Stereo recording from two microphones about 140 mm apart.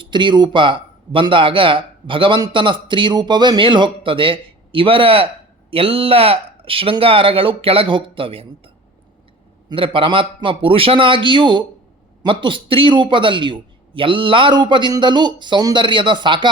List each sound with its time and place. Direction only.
0.0 s speech: 35° right (ahead or behind)